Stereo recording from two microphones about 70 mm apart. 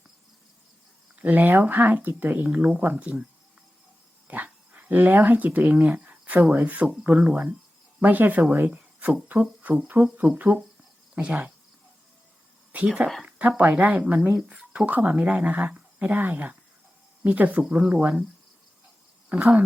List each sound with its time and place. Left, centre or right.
1.2 s speech: right
4.3 s dog: right
6.5 s speech: right
12.7 s speech: centre
19.3 s speech: centre